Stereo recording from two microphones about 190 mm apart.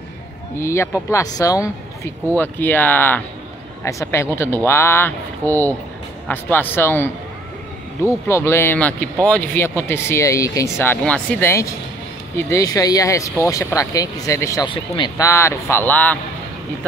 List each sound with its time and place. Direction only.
0.6 s speech: 15° left (ahead or behind)